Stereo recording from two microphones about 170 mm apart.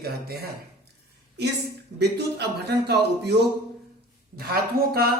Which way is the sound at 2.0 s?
80° right.